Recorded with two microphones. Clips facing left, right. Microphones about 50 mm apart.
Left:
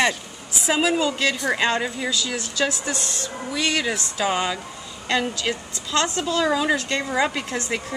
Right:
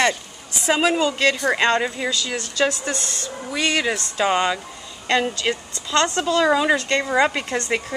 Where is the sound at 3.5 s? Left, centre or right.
Centre.